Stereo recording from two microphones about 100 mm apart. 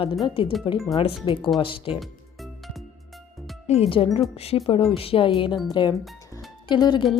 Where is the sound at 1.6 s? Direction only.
60° left (ahead or behind).